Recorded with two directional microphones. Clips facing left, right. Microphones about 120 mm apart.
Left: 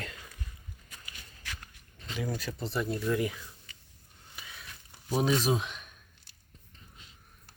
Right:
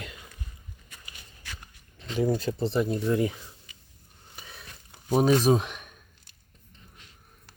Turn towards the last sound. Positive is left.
turn(degrees=-45)  # may be behind; listen again after turning